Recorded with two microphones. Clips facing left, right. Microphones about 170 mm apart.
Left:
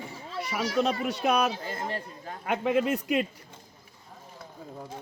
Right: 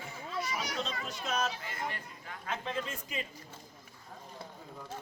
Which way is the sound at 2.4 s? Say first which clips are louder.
Left 11 dB; 70° left (ahead or behind).